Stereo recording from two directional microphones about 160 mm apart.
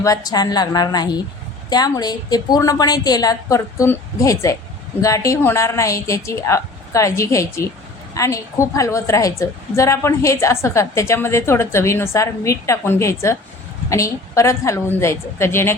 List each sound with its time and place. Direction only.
0.0 s a woman's voice: 20° left (ahead or behind)